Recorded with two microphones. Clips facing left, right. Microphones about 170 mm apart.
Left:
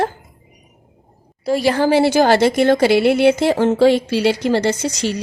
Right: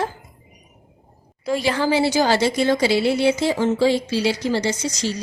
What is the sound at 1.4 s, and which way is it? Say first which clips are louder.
A woman's voice: left 5 dB; 40° left (ahead or behind).